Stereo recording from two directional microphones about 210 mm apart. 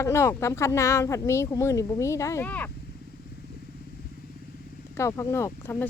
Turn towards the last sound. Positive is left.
turn(degrees=10)  # may be behind; listen again after turning